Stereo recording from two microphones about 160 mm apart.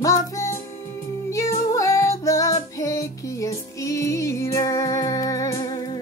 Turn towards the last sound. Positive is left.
turn(degrees=25)  # may be behind; listen again after turning